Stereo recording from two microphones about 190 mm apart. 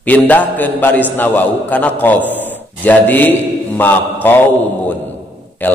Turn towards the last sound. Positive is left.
turn(degrees=10)  # may be behind; listen again after turning